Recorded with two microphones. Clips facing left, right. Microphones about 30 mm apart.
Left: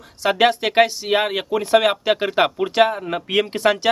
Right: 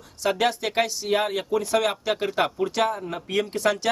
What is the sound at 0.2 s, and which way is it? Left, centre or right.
Speech, left.